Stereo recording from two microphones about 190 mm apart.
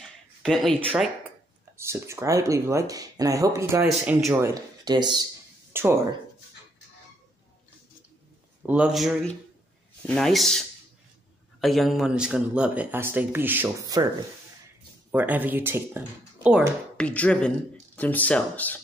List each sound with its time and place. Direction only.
0.0 s a sound: centre (ahead or behind)
1.8 s speech: 15° right (ahead or behind)
4.8 s a sound: 20° right (ahead or behind)
8.6 s speech: 5° right (ahead or behind)
11.6 s speech: centre (ahead or behind); by 14.0 s 15° right (ahead or behind)
15.0 s speech: 10° right (ahead or behind)
17.0 s speech: 5° left (ahead or behind)